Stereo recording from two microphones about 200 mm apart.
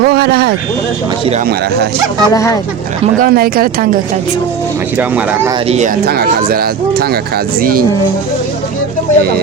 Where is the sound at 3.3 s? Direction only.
50° right (ahead or behind).